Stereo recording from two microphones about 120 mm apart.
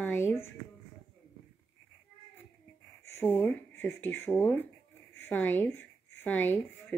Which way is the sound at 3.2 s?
15° left (ahead or behind).